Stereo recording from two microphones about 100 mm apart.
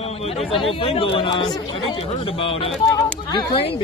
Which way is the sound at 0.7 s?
65° left (ahead or behind).